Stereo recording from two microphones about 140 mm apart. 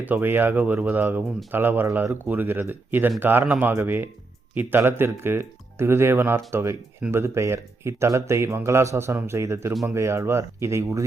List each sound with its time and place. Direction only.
0.0 s speech: 15° right (ahead or behind)